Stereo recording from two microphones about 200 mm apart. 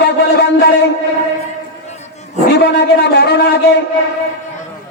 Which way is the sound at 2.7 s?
60° left (ahead or behind).